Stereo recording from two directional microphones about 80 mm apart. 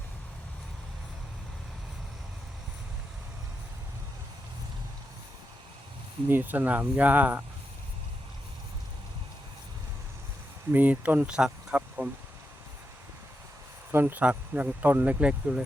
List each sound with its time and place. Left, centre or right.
6.2 s speech: right
10.7 s speech: right
13.9 s speech: right